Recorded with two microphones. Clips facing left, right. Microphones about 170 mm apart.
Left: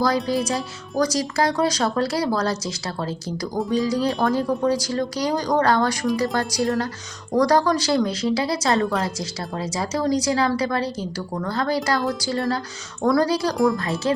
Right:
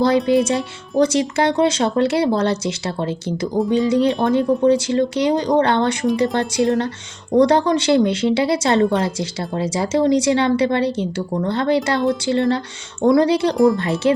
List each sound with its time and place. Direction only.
0.4 s speech: 25° right (ahead or behind)